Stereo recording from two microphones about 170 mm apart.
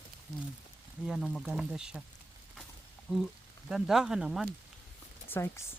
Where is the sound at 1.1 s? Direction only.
Centre (ahead or behind).